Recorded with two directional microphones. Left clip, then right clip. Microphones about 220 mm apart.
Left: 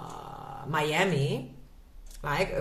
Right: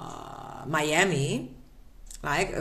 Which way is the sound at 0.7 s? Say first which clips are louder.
Right 2 dB; 40° right (ahead or behind).